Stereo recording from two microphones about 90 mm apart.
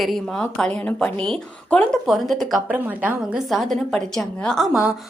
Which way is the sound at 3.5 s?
Centre (ahead or behind).